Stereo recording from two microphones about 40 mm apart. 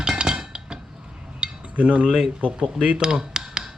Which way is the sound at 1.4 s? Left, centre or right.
Right.